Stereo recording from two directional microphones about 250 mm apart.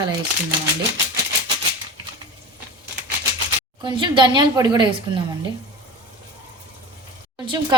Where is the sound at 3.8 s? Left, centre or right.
Centre.